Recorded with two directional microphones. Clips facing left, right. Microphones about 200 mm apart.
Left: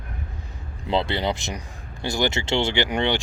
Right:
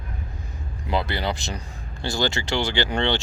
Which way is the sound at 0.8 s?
25° left (ahead or behind).